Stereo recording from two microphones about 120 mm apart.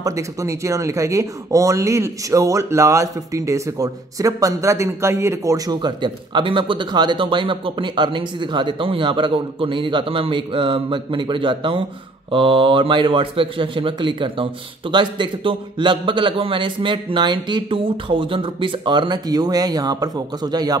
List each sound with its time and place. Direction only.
0.0 s a man's voice: 25° right (ahead or behind)